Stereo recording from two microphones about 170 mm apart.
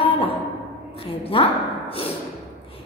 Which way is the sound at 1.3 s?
30° left (ahead or behind).